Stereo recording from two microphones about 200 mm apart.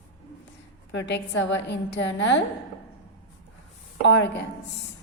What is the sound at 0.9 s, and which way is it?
A woman's voice, 60° left (ahead or behind).